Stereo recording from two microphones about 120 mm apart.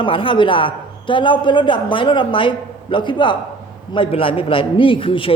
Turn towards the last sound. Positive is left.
turn(degrees=45)  # may be behind; listen again after turning